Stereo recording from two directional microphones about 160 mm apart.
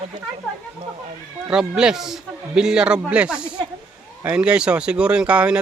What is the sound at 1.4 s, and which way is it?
A man's voice, 5° right (ahead or behind).